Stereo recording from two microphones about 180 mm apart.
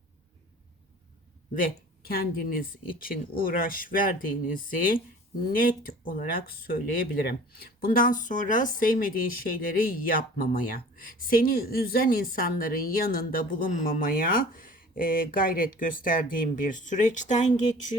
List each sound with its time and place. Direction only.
1.5 s speech: 55° left (ahead or behind)